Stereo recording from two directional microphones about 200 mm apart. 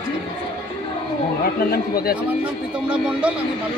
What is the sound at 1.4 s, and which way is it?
Speech, 50° left (ahead or behind).